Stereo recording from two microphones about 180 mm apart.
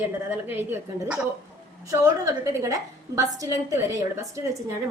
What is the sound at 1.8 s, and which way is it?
Speech, 15° right (ahead or behind).